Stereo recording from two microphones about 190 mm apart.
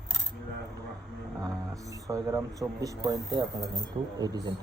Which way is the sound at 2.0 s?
15° right (ahead or behind).